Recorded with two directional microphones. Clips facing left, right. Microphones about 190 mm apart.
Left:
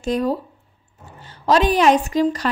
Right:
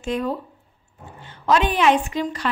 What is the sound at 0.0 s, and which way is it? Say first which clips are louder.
Speech: left 4 dB; 40° left (ahead or behind).